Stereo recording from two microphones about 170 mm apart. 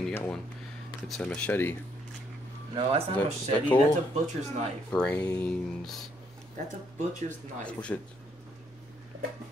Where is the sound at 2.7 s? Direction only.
35° right (ahead or behind).